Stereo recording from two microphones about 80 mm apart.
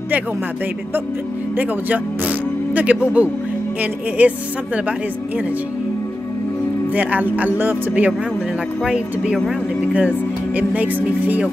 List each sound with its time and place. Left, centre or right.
1.6 s speech: right
6.9 s speech: right
8.8 s speech: centre